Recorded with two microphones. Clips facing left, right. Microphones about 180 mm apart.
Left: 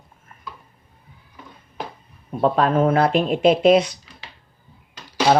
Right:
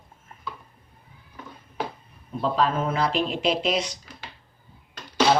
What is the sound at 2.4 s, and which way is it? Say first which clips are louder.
Speech: left 6 dB; 55° left (ahead or behind).